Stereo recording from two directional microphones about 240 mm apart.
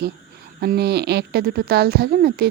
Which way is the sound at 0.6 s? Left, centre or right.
Right.